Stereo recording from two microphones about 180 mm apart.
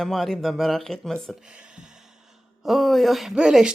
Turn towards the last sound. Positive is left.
turn(degrees=-5)  # may be behind; listen again after turning